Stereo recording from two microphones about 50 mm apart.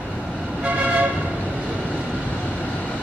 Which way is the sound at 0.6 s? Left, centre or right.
Right.